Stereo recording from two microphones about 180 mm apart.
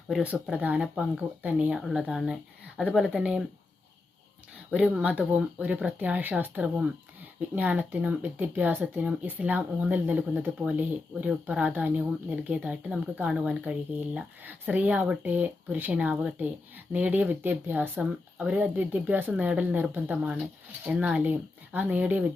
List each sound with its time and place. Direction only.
0.1 s speech: 5° right (ahead or behind)
4.7 s speech: 10° right (ahead or behind)